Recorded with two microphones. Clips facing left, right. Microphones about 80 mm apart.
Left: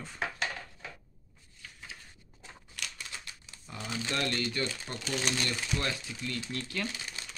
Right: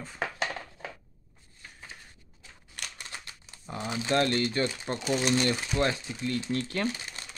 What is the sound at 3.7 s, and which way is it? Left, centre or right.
Speech, right.